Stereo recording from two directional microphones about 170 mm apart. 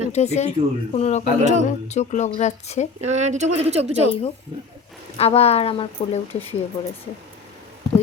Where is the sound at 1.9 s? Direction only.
45° left (ahead or behind).